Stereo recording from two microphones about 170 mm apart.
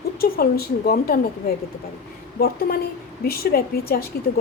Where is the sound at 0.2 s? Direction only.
65° left (ahead or behind).